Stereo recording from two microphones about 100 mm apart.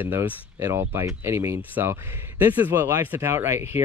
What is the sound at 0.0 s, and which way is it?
Speech, 20° right (ahead or behind).